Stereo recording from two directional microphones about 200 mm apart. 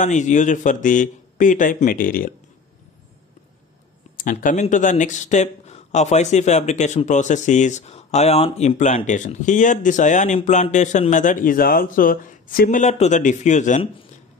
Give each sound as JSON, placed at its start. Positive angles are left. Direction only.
{"t": 0.0, "sound": "speech", "side_deg": 40}
{"t": 4.2, "sound": "speech", "side_deg": 40}